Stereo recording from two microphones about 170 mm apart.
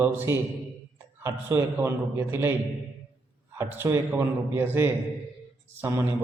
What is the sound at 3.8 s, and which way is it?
A man's voice, 15° right (ahead or behind).